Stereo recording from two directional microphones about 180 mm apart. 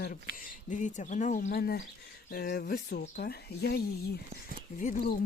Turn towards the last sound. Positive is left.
turn(degrees=50)  # may be behind; listen again after turning